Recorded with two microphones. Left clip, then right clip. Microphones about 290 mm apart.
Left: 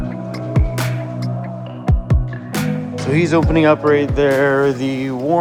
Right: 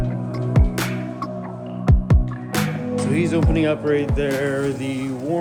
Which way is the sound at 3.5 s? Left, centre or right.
Left.